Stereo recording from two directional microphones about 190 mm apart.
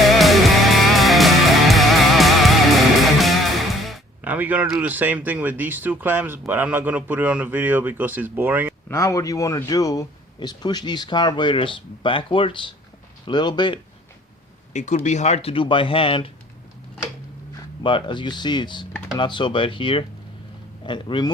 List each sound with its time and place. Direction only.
0.1 s music: centre (ahead or behind)
3.0 s speech: centre (ahead or behind)
8.9 s a man's voice: 15° left (ahead or behind)
14.7 s speech: 40° left (ahead or behind)
17.8 s a man's voice: 25° left (ahead or behind)